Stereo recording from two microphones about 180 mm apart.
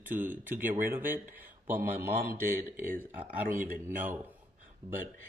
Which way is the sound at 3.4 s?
50° right (ahead or behind).